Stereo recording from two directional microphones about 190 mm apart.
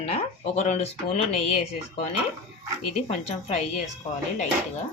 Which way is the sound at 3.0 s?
35° left (ahead or behind).